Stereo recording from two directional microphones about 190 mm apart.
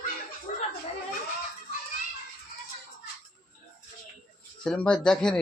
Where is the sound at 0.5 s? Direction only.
40° left (ahead or behind).